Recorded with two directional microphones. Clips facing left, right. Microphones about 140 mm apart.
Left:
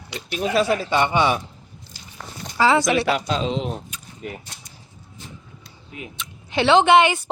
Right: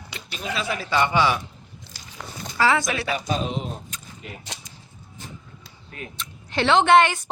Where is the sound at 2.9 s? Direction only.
80° left.